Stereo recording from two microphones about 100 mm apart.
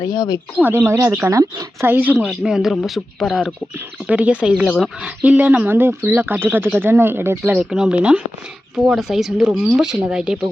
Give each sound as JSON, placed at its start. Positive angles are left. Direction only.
{"t": 0.0, "sound": "speech", "side_deg": 45}
{"t": 0.6, "sound": "speech", "side_deg": -25}
{"t": 1.9, "sound": "speech", "side_deg": -20}
{"t": 2.2, "sound": "speech", "side_deg": -5}
{"t": 4.0, "sound": "speech", "side_deg": -15}
{"t": 7.5, "sound": "speech", "side_deg": -10}